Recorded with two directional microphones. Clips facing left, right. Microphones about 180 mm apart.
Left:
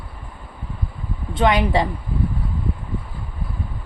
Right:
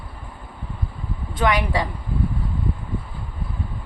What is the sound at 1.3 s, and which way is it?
Speech, 25° left (ahead or behind).